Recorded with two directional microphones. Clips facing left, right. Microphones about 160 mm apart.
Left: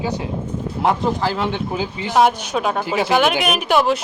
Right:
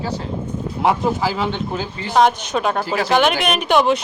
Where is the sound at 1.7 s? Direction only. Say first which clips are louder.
Even; 15° left (ahead or behind).